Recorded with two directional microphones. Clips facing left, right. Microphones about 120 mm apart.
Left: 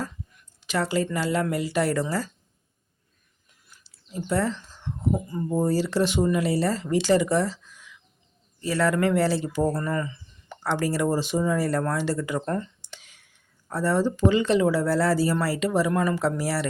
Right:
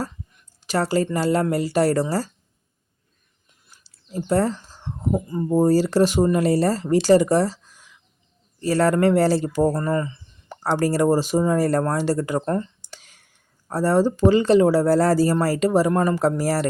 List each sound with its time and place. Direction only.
0.6 s speech: 40° right (ahead or behind)
3.7 s a sound: 40° right (ahead or behind)
5.1 s speech: 25° right (ahead or behind)
5.5 s speech: 40° right (ahead or behind)